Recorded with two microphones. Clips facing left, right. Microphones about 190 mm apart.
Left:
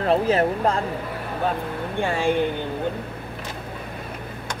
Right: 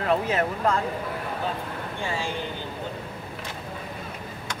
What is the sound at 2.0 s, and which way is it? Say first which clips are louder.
Speech: left 9 dB; 55° left (ahead or behind).